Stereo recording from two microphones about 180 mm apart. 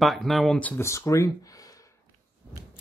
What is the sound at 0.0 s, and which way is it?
Speech, centre (ahead or behind).